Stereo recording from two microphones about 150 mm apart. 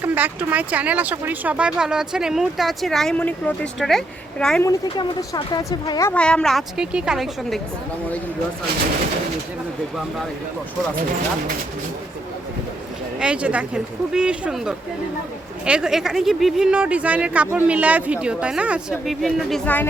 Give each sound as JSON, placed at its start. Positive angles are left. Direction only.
{"t": 0.0, "sound": "speech", "side_deg": -10}
{"t": 4.9, "sound": "speech", "side_deg": 30}
{"t": 6.1, "sound": "speech", "side_deg": 5}
{"t": 13.1, "sound": "speech", "side_deg": -5}